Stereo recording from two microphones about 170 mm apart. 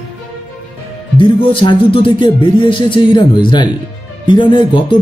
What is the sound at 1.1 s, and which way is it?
Speech, 30° left (ahead or behind).